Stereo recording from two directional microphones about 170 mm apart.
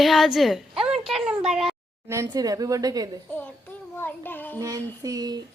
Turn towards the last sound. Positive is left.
turn(degrees=-20)  # may be behind; listen again after turning